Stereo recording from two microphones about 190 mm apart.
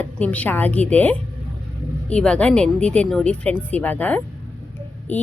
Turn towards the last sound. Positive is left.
turn(degrees=10)  # may be behind; listen again after turning